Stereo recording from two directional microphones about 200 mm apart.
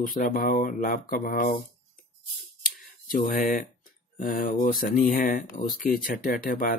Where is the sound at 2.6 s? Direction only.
45° left (ahead or behind).